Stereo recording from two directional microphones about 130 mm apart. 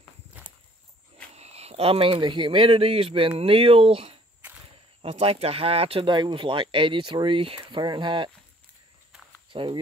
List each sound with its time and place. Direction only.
1.3 s speech: 55° right (ahead or behind); by 8.3 s 40° right (ahead or behind)
9.5 s speech: 40° right (ahead or behind)